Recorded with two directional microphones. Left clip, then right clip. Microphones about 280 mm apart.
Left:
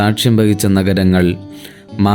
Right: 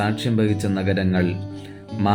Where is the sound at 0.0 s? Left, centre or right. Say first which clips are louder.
Left 8 dB; left.